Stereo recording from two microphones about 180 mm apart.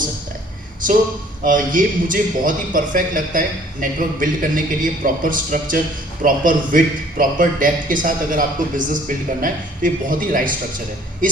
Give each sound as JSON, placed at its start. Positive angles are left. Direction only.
{"t": 1.5, "sound": "a man's voice", "side_deg": -50}